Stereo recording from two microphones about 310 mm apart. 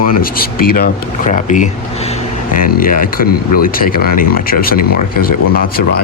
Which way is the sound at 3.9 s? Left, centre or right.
Left.